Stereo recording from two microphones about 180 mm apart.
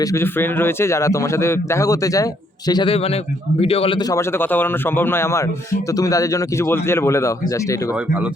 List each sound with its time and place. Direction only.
0.0 s a man's voice: 15° left (ahead or behind)